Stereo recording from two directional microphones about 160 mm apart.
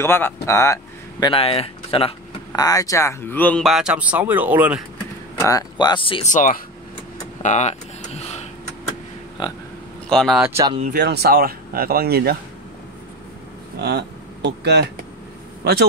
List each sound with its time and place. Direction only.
0.0 s speech: 15° left (ahead or behind)
1.2 s speech: 35° left (ahead or behind)
2.6 s speech: 20° left (ahead or behind)
3.6 s speech: 5° right (ahead or behind)
5.4 s speech: 20° left (ahead or behind)
6.2 s speech: 55° left (ahead or behind)
7.4 s a sound: 45° left (ahead or behind)
9.4 s speech: 30° left (ahead or behind)
10.0 s speech: centre (ahead or behind)
10.9 s speech: 80° right
13.7 s speech: 90° right